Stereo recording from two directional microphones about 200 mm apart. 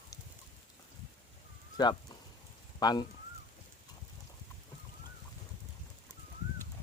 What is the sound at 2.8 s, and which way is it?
Speech, 20° left (ahead or behind).